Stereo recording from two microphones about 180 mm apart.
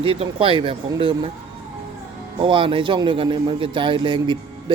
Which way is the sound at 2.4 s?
30° right (ahead or behind).